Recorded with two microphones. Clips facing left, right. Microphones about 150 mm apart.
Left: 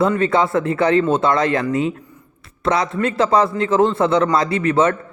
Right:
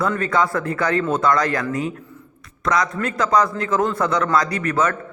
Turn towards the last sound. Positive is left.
turn(degrees=25)  # may be behind; listen again after turning